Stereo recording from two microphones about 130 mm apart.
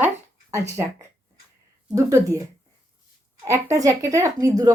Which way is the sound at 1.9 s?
25° right (ahead or behind).